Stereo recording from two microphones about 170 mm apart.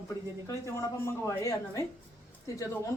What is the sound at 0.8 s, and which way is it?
Speech, 15° left (ahead or behind).